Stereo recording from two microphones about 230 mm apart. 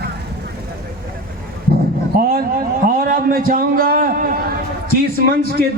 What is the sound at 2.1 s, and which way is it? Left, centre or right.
A man's voice, right.